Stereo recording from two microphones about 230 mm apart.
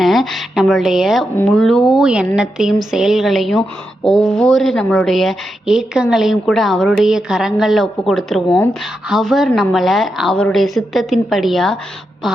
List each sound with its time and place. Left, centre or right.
0.0 s a woman's voice: centre
8.4 s speech: centre
9.0 s a woman's voice: centre